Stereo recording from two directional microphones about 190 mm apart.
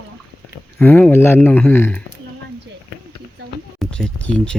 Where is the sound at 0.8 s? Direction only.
10° left (ahead or behind).